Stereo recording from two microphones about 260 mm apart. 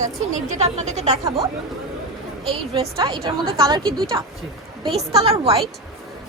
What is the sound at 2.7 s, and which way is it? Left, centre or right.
A woman's voice, centre.